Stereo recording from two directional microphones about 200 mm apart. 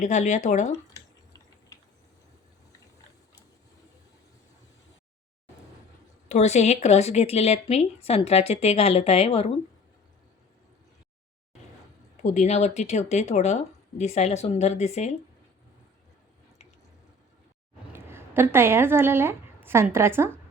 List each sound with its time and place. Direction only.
0.0 s a woman's voice: 35° left (ahead or behind)
0.9 s a sound: 15° left (ahead or behind)
6.2 s a woman's voice: 35° left (ahead or behind)
12.2 s a woman's voice: 35° left (ahead or behind)
17.9 s a woman's voice: 10° right (ahead or behind)